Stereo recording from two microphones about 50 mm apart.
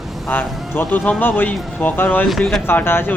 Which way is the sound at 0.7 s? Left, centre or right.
Left.